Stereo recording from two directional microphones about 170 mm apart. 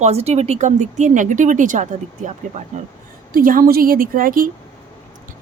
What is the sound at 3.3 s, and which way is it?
A woman's voice, 55° right (ahead or behind).